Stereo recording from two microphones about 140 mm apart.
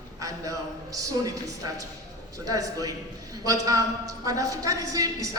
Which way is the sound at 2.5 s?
25° right (ahead or behind).